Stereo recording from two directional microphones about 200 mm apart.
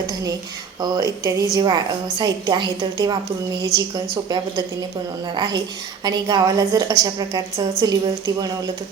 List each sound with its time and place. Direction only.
0.8 s a woman's voice: 20° right (ahead or behind)